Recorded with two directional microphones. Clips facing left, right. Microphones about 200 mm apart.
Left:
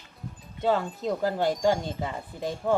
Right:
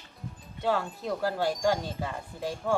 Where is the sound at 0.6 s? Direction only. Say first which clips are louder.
Left 3 dB; 20° left (ahead or behind).